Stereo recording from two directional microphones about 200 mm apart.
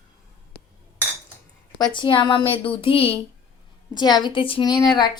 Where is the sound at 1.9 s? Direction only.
25° left (ahead or behind).